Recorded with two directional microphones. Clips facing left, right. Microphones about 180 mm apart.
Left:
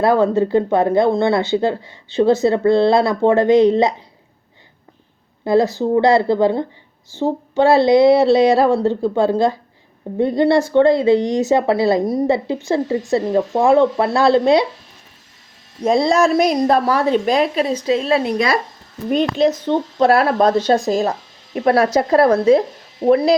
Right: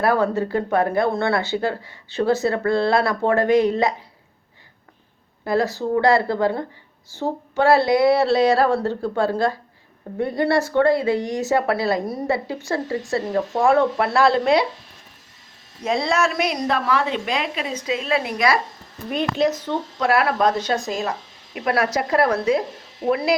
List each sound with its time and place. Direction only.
0.0 s speech: 20° left (ahead or behind)
5.5 s speech: 20° left (ahead or behind)
15.8 s a woman's voice: 35° left (ahead or behind)